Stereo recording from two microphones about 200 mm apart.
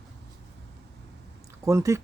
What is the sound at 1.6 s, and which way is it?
Speech, 15° right (ahead or behind).